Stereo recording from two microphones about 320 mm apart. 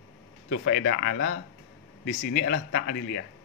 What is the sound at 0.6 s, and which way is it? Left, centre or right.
Speech, left.